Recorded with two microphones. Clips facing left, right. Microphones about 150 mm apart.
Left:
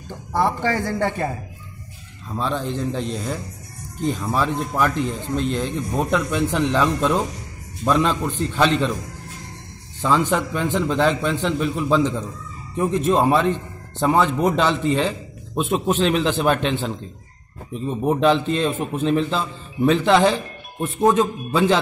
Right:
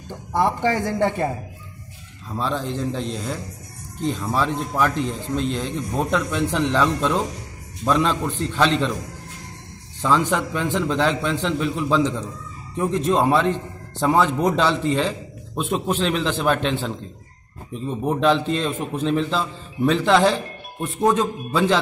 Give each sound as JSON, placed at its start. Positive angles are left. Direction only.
{"t": 0.3, "sound": "a man's voice", "side_deg": -20}
{"t": 2.3, "sound": "a man's voice", "side_deg": 0}
{"t": 10.0, "sound": "a man's voice", "side_deg": 5}